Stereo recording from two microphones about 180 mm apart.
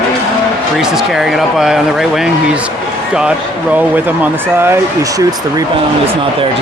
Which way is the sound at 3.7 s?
10° right (ahead or behind).